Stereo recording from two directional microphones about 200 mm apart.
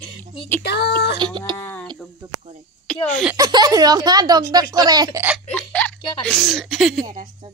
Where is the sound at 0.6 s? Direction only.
55° left (ahead or behind).